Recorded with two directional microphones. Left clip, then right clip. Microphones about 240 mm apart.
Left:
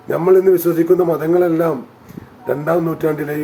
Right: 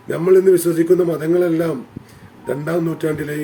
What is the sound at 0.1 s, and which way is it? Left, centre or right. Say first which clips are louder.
Speech: left 1 dB; right.